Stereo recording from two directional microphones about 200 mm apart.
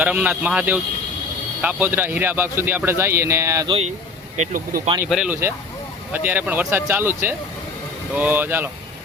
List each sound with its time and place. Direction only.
0.0 s a man's voice: 5° right (ahead or behind)
4.4 s speech: 40° right (ahead or behind)
5.0 s a man's voice: centre (ahead or behind)